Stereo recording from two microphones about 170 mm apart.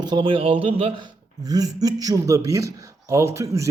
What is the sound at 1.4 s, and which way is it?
A man's voice, 20° right (ahead or behind).